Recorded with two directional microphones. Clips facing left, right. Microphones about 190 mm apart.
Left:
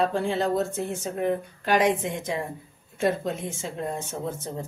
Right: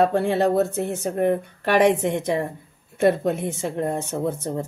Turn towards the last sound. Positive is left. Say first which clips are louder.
# right 6 dB
turn(degrees=-65)  # may be behind; listen again after turning